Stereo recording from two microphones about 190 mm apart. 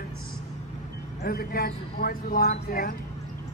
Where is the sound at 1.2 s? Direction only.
50° left (ahead or behind).